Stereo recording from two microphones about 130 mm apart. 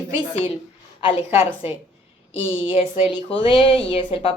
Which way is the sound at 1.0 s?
45° left (ahead or behind).